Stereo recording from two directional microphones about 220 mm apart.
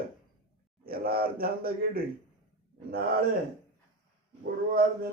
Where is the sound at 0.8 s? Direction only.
45° right (ahead or behind).